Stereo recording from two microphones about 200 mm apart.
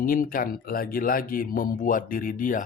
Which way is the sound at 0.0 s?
45° left (ahead or behind).